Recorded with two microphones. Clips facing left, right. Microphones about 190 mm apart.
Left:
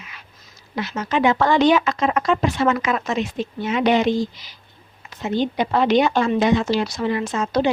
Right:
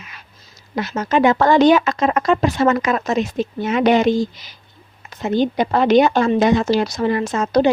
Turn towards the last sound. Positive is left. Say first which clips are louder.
# right 4 dB
turn(degrees=-40)  # may be behind; listen again after turning